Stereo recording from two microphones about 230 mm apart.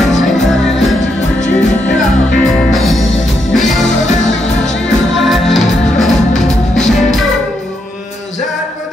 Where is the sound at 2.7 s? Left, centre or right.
Centre.